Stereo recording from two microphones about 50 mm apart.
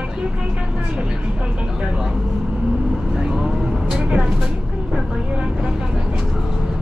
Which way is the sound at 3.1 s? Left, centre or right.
Centre.